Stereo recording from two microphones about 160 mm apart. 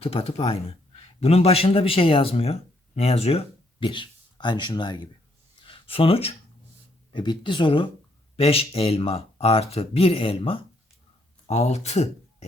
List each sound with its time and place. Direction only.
0.0 s speech: 40° left (ahead or behind)
5.5 s a sound: 30° left (ahead or behind)
7.1 s speech: 30° left (ahead or behind)